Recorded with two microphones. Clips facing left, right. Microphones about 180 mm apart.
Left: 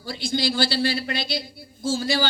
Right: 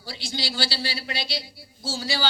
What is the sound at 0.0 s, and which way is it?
A man's voice, 50° left (ahead or behind).